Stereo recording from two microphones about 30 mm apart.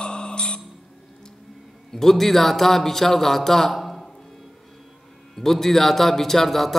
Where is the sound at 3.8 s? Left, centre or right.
Centre.